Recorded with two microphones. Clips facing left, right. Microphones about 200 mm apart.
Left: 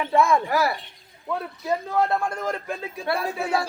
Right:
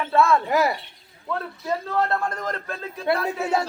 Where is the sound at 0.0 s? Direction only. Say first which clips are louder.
Even; 15° left (ahead or behind).